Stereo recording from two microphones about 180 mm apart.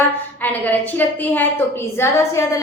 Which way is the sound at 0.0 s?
10° left (ahead or behind).